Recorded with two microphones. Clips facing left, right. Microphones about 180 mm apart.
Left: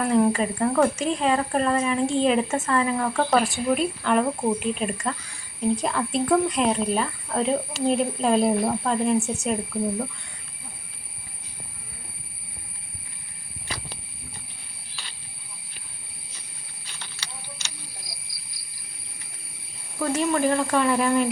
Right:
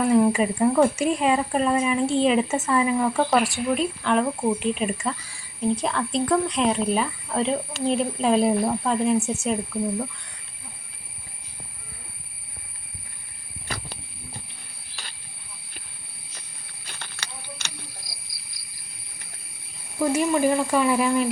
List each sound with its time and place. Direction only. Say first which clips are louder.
0.0 s speech: right 2 dB; 5° right (ahead or behind)
16.8 s a sound: right 3 dB; 55° right (ahead or behind)
20.0 s speech: right 2 dB; 10° right (ahead or behind)